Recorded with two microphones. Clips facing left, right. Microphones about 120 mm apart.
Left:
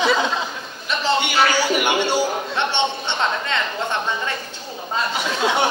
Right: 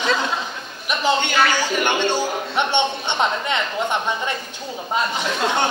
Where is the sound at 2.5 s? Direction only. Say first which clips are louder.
Right 4 dB; 15° right (ahead or behind).